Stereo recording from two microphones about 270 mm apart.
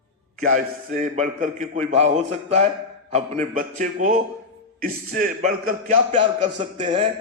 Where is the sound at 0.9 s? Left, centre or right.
Right.